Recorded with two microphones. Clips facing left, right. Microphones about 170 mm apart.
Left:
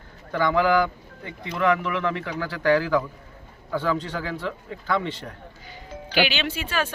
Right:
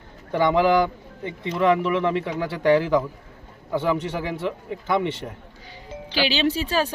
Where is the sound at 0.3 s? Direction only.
20° right (ahead or behind).